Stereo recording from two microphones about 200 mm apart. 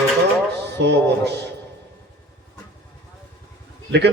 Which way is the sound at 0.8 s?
60° right (ahead or behind).